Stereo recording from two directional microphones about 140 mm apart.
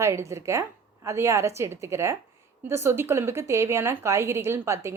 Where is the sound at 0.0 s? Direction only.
20° right (ahead or behind).